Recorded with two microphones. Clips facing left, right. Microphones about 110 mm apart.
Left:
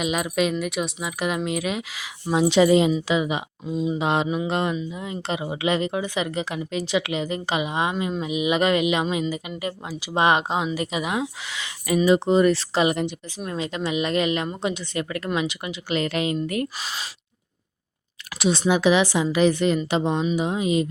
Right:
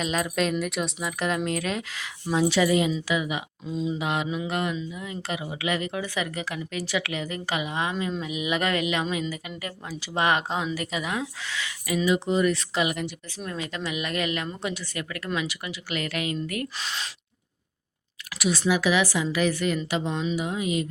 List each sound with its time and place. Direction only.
0.0 s speech: 10° left (ahead or behind)
2.2 s speech: 20° left (ahead or behind)
3.7 s speech: 10° left (ahead or behind)
3.9 s speech: 30° left (ahead or behind)
12.0 s speech: 35° left (ahead or behind)
16.7 s speech: 5° left (ahead or behind)
18.3 s speech: 25° left (ahead or behind)